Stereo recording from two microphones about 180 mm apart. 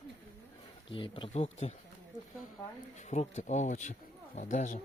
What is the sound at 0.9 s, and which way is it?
Speech, 30° left (ahead or behind).